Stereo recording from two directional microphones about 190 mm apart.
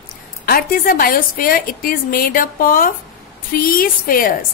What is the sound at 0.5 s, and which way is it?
A woman's voice, 50° left (ahead or behind).